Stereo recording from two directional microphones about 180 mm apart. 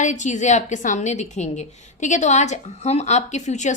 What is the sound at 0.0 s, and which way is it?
A woman's voice, 40° left (ahead or behind).